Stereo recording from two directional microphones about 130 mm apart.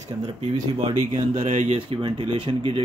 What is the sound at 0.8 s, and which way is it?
Speech, 50° right (ahead or behind).